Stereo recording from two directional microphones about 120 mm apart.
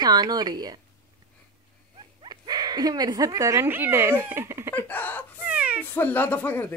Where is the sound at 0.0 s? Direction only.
35° right (ahead or behind).